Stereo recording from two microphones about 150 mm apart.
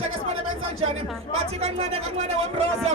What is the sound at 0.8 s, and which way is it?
A woman's voice, 40° right (ahead or behind).